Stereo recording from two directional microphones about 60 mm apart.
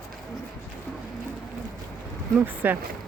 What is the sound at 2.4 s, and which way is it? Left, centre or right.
Speech, right.